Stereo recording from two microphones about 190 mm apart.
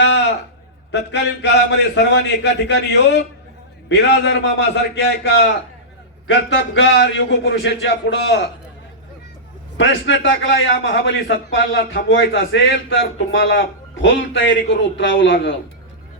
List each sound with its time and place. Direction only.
0.0 s a sound: 70° left (ahead or behind)
0.9 s a man's voice: 65° left (ahead or behind)
6.7 s a man's voice: 70° left (ahead or behind)
9.7 s a man's voice: 70° left (ahead or behind)